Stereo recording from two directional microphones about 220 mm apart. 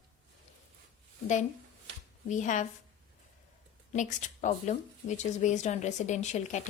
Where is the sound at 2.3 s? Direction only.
35° left (ahead or behind).